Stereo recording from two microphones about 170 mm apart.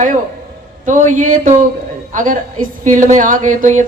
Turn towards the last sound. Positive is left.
turn(degrees=-45)  # may be behind; listen again after turning